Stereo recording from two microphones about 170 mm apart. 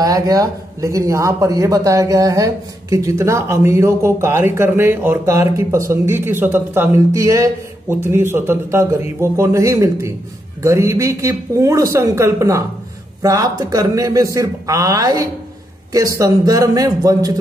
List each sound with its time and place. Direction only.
0.0 s a man's voice: 20° right (ahead or behind)